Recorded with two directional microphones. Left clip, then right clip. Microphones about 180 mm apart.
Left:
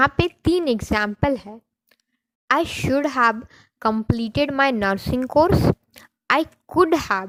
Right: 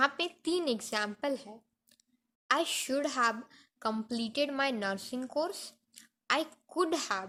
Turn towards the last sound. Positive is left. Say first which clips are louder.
# left 13 dB
turn(degrees=50)  # may be behind; listen again after turning